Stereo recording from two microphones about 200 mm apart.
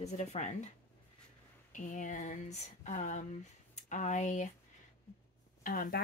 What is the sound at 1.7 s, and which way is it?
Speech, 40° left (ahead or behind).